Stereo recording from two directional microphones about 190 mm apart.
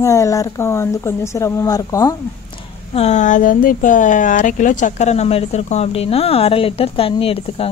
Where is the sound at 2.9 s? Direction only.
35° left (ahead or behind).